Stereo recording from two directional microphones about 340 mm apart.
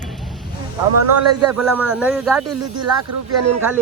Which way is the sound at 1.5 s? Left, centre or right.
Centre.